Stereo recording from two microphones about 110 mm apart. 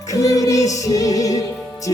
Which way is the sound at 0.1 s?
30° left (ahead or behind).